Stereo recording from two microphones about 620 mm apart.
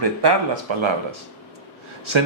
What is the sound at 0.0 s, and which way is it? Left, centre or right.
Speech, right.